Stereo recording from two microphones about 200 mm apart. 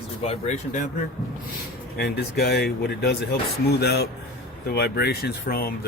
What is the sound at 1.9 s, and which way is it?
Speech, 55° left (ahead or behind).